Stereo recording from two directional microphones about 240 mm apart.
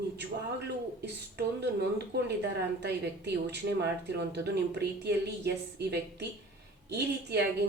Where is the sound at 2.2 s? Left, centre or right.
Right.